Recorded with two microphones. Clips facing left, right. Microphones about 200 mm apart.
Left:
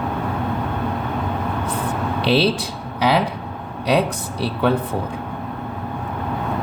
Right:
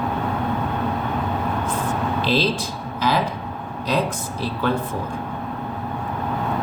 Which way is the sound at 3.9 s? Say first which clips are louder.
Left 4 dB; 70° left (ahead or behind).